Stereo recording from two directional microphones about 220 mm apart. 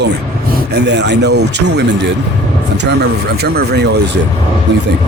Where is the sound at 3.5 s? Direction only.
50° right (ahead or behind).